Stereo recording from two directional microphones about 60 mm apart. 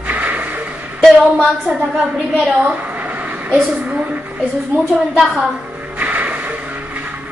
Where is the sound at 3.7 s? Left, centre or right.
Right.